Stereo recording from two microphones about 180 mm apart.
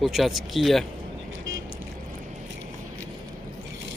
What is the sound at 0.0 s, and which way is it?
Speech, centre (ahead or behind).